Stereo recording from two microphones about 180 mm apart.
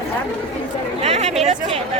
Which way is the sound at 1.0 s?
35° right (ahead or behind).